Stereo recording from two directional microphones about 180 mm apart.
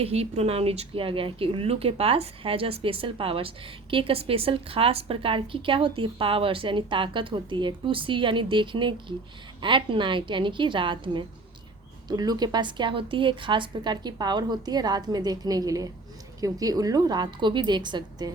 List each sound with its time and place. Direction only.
0.0 s speech: 35° right (ahead or behind)